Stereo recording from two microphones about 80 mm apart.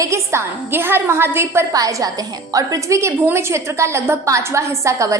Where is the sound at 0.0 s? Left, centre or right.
Right.